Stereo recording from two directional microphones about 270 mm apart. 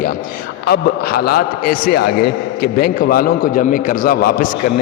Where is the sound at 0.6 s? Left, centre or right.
Left.